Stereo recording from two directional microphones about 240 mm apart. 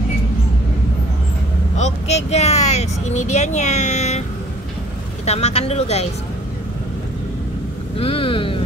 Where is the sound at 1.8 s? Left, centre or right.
Left.